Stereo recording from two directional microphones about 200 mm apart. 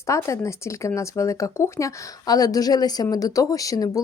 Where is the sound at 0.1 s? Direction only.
15° left (ahead or behind).